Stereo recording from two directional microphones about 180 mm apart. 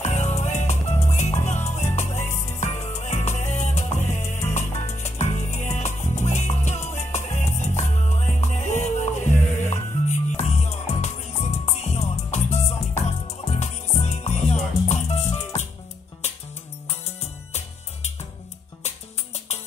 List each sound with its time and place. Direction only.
0.0 s music: 40° left (ahead or behind)